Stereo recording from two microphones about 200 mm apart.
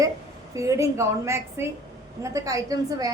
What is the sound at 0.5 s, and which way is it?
A woman's voice, 15° right (ahead or behind).